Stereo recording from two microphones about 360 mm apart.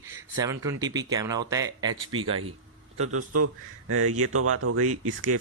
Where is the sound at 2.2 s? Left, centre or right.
Right.